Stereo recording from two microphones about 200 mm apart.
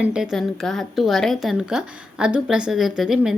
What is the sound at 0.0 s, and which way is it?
Speech, 5° right (ahead or behind).